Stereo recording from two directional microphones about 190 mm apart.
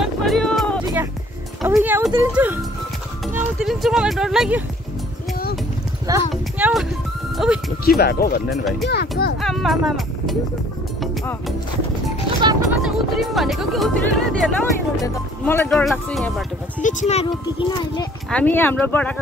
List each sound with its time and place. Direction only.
0.0 s music: centre (ahead or behind)
1.6 s speech: 5° right (ahead or behind)
3.6 s speech: centre (ahead or behind)
6.3 s speech: centre (ahead or behind)
8.0 s speech: 55° left (ahead or behind)
8.5 s speech: centre (ahead or behind)
8.8 s speech: 55° left (ahead or behind)
9.4 s speech: centre (ahead or behind)
12.6 s speech: centre (ahead or behind)
16.8 s speech: 35° left (ahead or behind)
18.3 s speech: 10° left (ahead or behind)